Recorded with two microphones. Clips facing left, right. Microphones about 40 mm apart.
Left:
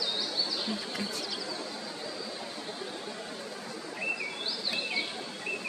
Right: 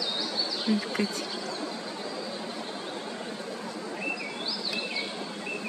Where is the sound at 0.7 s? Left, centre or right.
Right.